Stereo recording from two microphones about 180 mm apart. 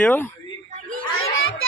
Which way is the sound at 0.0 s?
10° left (ahead or behind).